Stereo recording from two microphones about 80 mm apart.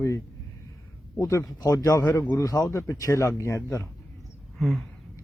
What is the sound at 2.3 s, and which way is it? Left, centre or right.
A man's voice, left.